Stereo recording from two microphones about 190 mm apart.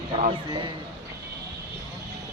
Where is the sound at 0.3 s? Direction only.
25° right (ahead or behind).